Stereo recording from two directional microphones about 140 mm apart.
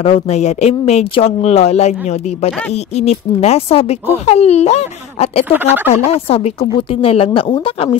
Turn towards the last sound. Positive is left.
turn(degrees=40)  # may be behind; listen again after turning